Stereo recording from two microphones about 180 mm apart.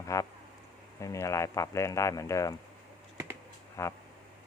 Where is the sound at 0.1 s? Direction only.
15° left (ahead or behind).